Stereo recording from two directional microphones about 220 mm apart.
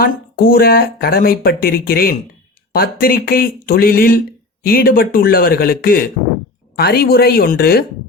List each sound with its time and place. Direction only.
0.0 s speech: 45° left (ahead or behind)